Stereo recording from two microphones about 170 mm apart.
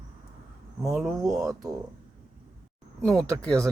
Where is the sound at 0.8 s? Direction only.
Centre (ahead or behind).